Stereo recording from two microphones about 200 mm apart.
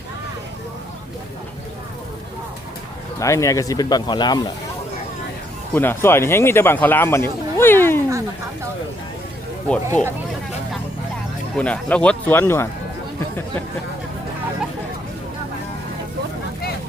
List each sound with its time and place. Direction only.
3.2 s speech: 15° left (ahead or behind)
5.7 s speech: 10° left (ahead or behind)
7.5 s cat: 10° left (ahead or behind)
9.6 s speech: 5° left (ahead or behind)
11.5 s speech: 5° left (ahead or behind)